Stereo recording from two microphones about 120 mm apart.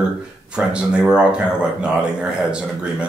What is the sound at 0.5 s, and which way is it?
Speech, 5° right (ahead or behind).